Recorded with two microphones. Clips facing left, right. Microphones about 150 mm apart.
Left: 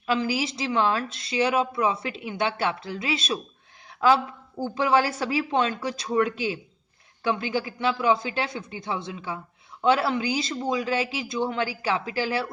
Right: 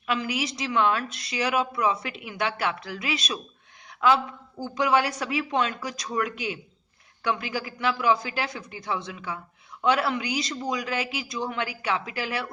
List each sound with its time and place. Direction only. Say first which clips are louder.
0.1 s a woman's voice: left 3 dB; 30° left (ahead or behind)